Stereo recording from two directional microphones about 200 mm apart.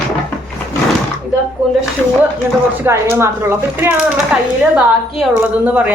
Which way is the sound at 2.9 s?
15° right (ahead or behind).